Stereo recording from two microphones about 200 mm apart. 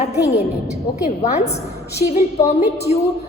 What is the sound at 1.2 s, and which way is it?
A woman's voice, 35° left (ahead or behind).